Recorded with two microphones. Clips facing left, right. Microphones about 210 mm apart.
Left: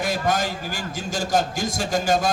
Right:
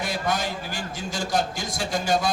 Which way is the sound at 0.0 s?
45° left (ahead or behind).